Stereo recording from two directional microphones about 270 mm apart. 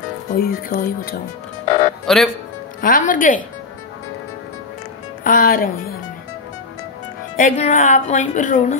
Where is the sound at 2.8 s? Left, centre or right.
Left.